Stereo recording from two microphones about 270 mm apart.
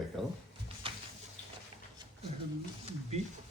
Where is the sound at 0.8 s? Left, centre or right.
Centre.